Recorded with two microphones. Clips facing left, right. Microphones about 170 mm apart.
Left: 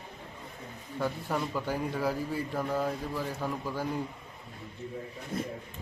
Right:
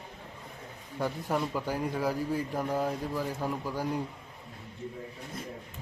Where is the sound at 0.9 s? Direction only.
15° right (ahead or behind).